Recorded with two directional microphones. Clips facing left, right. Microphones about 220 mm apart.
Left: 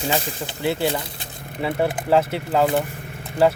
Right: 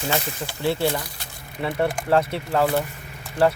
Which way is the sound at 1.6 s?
5° left (ahead or behind).